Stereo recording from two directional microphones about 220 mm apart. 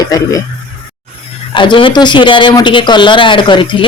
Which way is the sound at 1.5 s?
20° left (ahead or behind).